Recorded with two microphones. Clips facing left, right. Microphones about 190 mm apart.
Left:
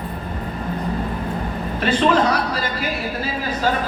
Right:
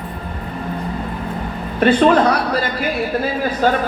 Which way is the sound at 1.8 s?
55° right (ahead or behind).